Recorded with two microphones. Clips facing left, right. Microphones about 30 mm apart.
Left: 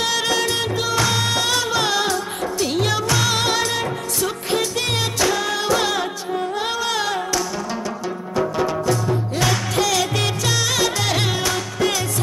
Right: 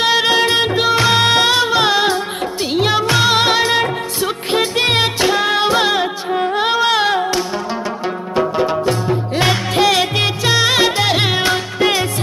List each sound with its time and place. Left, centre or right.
0.0 s music: right